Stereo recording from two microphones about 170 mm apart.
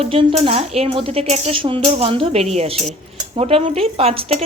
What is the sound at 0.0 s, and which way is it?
Speech, 30° right (ahead or behind).